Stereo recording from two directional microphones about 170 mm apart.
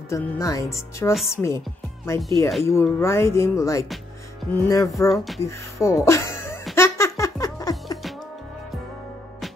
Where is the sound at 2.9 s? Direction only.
15° left (ahead or behind).